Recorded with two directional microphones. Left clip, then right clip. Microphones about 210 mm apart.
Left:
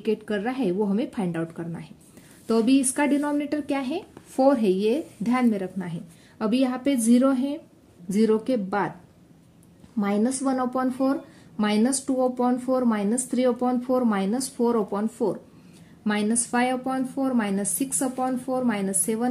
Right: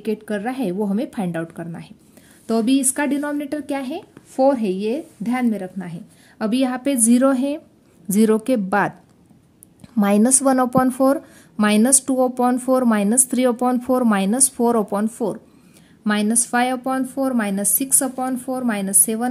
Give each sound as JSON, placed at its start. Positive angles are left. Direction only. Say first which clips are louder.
{"t": 0.0, "sound": "speech", "louder": "right 2 dB", "side_deg": -15}
{"t": 9.9, "sound": "speech", "louder": "right 8 dB", "side_deg": -40}